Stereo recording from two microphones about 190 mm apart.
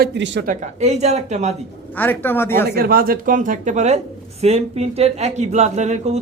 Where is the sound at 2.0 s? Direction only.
10° left (ahead or behind).